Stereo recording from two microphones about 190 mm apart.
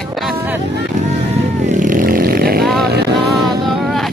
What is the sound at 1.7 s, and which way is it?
Vehicle, 45° right (ahead or behind).